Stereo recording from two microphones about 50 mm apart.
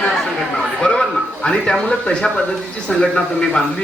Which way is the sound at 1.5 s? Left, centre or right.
Centre.